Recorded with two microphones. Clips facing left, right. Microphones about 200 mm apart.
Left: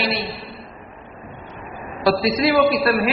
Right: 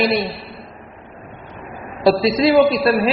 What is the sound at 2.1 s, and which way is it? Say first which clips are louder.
A man's voice: right 4 dB; 25° right (ahead or behind).